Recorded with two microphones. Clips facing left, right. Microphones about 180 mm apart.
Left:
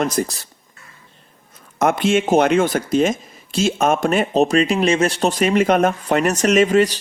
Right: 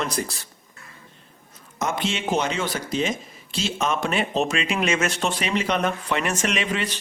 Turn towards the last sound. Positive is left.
turn(degrees=40)  # may be behind; listen again after turning